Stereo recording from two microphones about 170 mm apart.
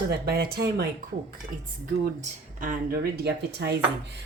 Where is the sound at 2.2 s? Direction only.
50° right (ahead or behind); by 3.7 s 75° right (ahead or behind).